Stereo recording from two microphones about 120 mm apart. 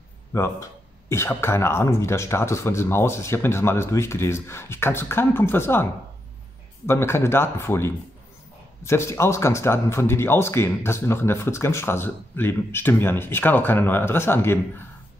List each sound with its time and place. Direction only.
0.3 s speech: 20° left (ahead or behind)
6.9 s speech: 20° left (ahead or behind)